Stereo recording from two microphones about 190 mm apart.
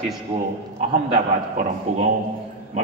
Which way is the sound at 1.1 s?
40° right (ahead or behind).